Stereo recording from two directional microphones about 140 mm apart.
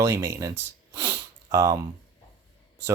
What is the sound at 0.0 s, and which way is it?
Speech, 20° right (ahead or behind).